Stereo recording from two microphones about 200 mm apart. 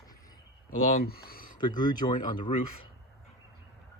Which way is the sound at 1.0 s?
50° left (ahead or behind).